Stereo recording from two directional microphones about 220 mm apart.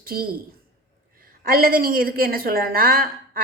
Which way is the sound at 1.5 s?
40° right (ahead or behind).